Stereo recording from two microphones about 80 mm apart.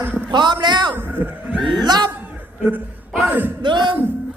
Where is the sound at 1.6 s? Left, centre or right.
Right.